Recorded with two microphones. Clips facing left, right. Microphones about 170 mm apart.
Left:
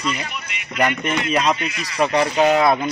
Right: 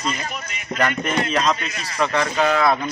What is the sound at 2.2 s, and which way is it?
Speech, 25° left (ahead or behind).